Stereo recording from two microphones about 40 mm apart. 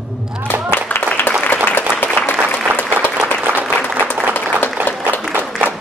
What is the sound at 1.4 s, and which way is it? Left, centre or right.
Applause, left.